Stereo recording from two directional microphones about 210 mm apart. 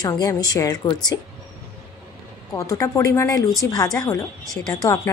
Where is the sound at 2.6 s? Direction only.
15° left (ahead or behind).